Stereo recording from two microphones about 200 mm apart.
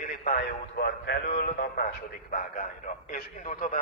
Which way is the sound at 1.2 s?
40° left (ahead or behind).